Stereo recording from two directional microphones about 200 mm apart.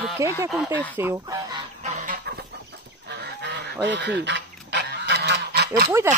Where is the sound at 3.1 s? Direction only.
55° right (ahead or behind).